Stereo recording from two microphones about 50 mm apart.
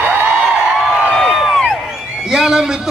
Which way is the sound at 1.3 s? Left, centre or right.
Centre.